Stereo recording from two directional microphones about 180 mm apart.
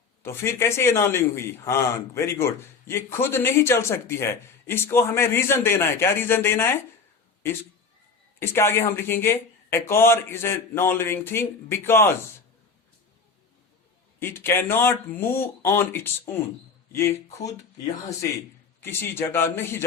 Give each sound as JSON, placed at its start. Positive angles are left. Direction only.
{"t": 0.2, "sound": "a man's voice", "side_deg": 15}
{"t": 8.4, "sound": "a man's voice", "side_deg": 15}
{"t": 14.2, "sound": "a man's voice", "side_deg": 15}
{"t": 18.8, "sound": "a man's voice", "side_deg": 15}